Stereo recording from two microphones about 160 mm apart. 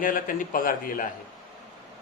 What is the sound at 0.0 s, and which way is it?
Speech, 60° left (ahead or behind).